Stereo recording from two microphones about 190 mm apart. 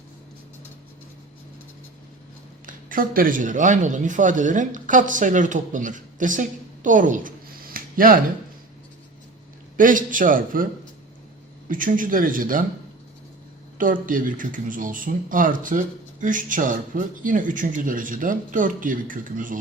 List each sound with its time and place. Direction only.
2.6 s a man's voice: 45° right (ahead or behind)
9.7 s speech: 45° right (ahead or behind)
11.7 s speech: 45° right (ahead or behind)
13.7 s speech: 45° right (ahead or behind)